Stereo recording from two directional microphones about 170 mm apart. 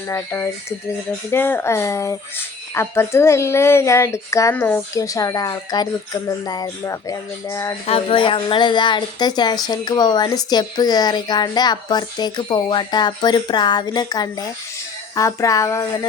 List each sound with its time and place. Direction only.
0.1 s speech: 15° left (ahead or behind)
7.9 s a woman's voice: 35° left (ahead or behind); by 15.9 s 20° left (ahead or behind)